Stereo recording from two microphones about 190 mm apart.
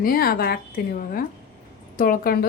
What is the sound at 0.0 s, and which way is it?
Speech, 50° left (ahead or behind).